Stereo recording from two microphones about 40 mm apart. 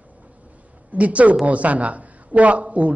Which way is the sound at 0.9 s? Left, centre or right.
Right.